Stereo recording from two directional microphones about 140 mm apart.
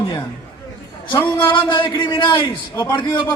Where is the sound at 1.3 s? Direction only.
35° left (ahead or behind).